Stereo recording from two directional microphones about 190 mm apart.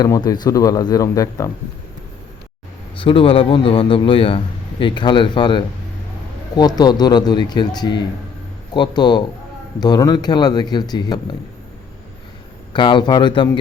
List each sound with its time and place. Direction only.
0.0 s a man's voice: 20° left (ahead or behind)
3.0 s a man's voice: 30° left (ahead or behind)
12.7 s a man's voice: 25° left (ahead or behind)